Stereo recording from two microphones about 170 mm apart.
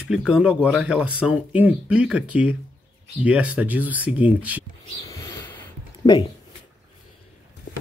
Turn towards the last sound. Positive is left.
turn(degrees=25)  # may be behind; listen again after turning